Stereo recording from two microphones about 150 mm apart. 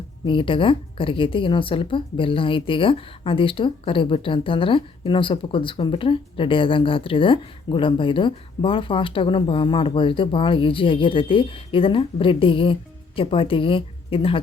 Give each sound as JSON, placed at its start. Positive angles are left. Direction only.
{"t": 0.3, "sound": "a woman's voice", "side_deg": 35}